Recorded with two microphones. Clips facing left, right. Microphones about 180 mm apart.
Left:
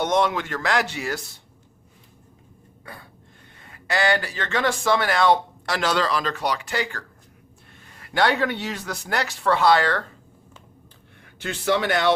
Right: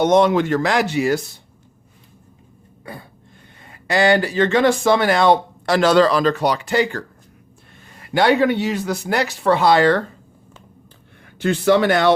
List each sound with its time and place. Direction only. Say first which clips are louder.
0.0 s speech: right 8 dB; 25° right (ahead or behind)
2.8 s a sound: right 7 dB; 20° right (ahead or behind)
3.6 s speech: right 6 dB; 20° right (ahead or behind)
8.1 s speech: right 6 dB; 10° right (ahead or behind)
11.4 s speech: right 8 dB; 40° right (ahead or behind)